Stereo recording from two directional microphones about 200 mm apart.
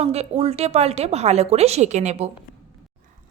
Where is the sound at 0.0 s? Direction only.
30° right (ahead or behind).